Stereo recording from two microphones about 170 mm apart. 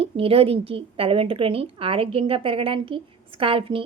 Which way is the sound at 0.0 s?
35° right (ahead or behind).